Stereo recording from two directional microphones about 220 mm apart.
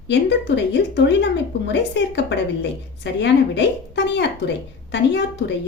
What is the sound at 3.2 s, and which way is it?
Speech, 50° left (ahead or behind).